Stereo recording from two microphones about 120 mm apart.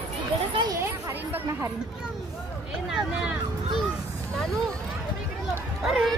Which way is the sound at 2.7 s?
5° right (ahead or behind).